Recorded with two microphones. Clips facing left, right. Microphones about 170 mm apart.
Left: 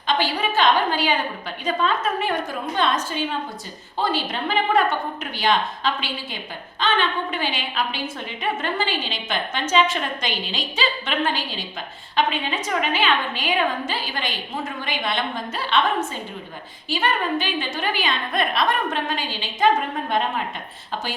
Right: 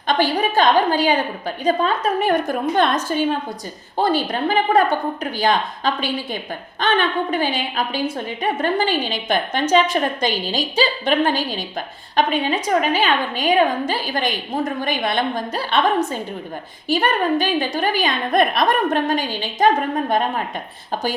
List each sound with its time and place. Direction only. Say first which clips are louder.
0.1 s a woman's voice: right 4 dB; 40° right (ahead or behind)
16.9 s a woman's voice: right 5 dB; 40° right (ahead or behind)